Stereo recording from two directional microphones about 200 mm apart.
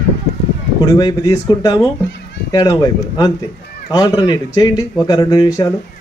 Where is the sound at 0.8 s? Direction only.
20° left (ahead or behind).